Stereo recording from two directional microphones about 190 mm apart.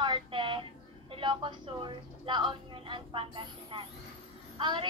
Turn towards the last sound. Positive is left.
turn(degrees=-25)  # may be behind; listen again after turning